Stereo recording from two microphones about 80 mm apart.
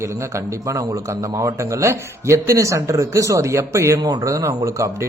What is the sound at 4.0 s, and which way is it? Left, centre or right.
A man's voice, right.